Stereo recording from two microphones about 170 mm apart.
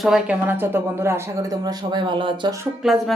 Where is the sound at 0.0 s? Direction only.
5° right (ahead or behind); by 2.6 s 30° right (ahead or behind).